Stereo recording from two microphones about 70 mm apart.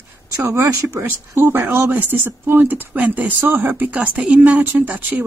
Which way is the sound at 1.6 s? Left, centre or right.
Right.